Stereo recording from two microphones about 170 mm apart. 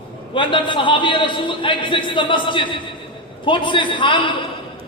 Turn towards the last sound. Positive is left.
turn(degrees=30)  # may be behind; listen again after turning